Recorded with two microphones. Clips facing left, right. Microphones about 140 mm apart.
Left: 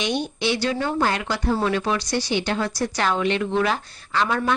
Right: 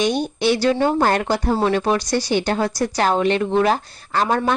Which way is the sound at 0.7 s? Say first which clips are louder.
Right 6 dB; 30° right (ahead or behind).